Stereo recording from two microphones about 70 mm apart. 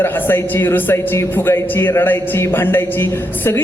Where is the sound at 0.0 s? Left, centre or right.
Left.